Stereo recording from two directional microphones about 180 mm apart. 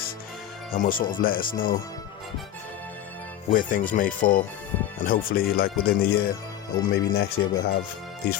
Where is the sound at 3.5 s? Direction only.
50° left (ahead or behind).